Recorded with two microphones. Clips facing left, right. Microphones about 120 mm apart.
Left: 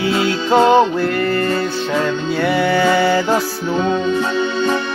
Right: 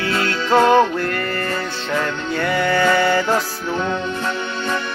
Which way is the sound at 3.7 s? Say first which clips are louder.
Left 6 dB; 15° left (ahead or behind).